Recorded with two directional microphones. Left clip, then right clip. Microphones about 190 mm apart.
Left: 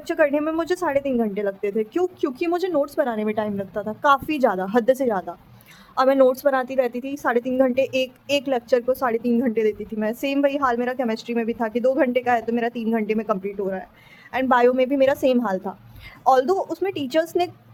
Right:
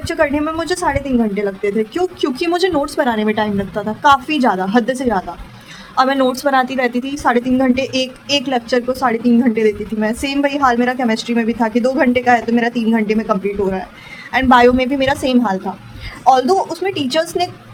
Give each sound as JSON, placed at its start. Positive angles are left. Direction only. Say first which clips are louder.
{"t": 0.1, "sound": "a woman's voice", "louder": "right 3 dB", "side_deg": 35}